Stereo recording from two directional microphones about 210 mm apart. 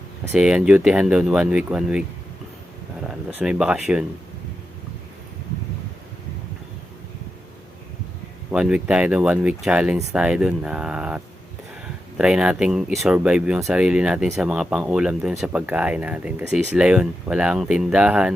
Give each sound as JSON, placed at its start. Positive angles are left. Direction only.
{"t": 0.3, "sound": "speech", "side_deg": -5}
{"t": 3.1, "sound": "speech", "side_deg": -5}
{"t": 8.4, "sound": "speech", "side_deg": -5}